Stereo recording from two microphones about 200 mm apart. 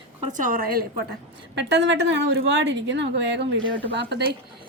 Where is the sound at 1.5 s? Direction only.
60° right (ahead or behind).